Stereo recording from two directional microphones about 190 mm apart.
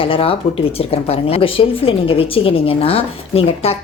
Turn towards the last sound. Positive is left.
turn(degrees=30)  # may be behind; listen again after turning